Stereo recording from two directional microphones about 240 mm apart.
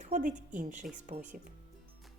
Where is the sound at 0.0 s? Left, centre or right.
Right.